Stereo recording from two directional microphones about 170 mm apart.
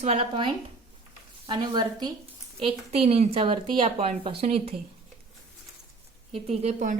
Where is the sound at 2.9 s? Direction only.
35° right (ahead or behind).